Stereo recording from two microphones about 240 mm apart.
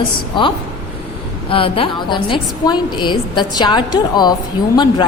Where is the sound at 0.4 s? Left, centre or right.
Centre.